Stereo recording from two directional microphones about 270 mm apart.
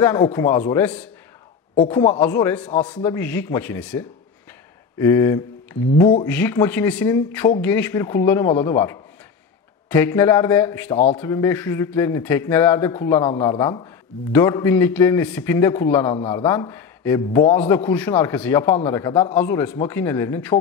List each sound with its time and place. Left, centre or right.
0.0 s speech: centre
2.2 s a man's voice: centre